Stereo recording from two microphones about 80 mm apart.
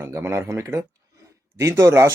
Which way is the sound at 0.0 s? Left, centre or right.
Right.